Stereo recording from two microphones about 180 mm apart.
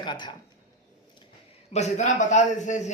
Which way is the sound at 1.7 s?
40° left (ahead or behind).